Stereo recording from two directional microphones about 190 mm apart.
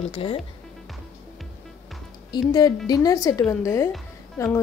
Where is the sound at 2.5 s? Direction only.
20° left (ahead or behind).